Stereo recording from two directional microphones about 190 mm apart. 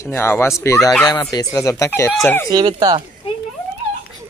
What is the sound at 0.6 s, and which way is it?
Speech, 15° left (ahead or behind).